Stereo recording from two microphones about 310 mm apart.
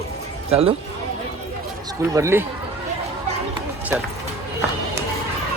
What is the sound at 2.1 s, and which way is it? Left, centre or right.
Speech, centre.